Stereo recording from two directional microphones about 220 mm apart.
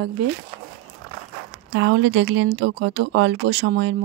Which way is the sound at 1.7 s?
55° right (ahead or behind).